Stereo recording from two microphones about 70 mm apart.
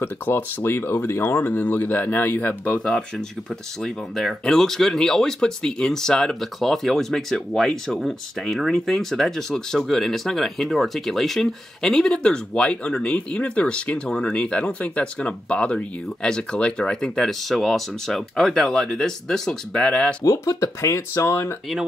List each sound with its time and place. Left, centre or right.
0.0 s speech: left
2.8 s speech: centre
4.5 s speech: centre
20.2 s speech: left